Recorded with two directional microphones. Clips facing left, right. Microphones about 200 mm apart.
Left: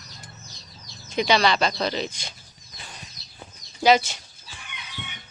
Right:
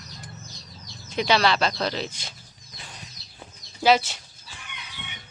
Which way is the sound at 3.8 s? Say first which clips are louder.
Left 1 dB; centre (ahead or behind).